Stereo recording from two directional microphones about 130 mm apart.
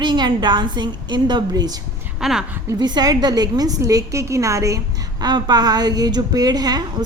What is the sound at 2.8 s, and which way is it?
A woman's voice, 35° right (ahead or behind).